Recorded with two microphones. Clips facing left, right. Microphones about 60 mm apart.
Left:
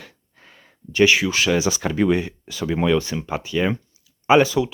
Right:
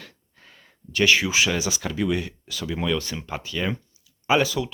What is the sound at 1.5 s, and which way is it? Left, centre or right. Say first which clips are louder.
Speech: left 6 dB; left.